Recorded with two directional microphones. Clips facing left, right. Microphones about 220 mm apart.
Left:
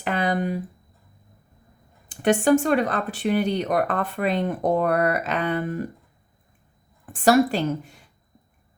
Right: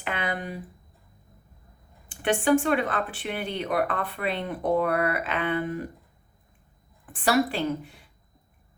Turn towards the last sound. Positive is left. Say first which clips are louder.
# left 3 dB
turn(degrees=45)  # may be behind; listen again after turning